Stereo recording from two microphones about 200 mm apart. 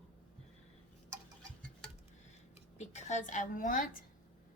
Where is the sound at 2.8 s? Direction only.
35° left (ahead or behind).